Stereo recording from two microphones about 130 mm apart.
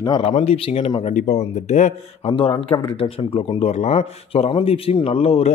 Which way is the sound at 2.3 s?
45° left (ahead or behind).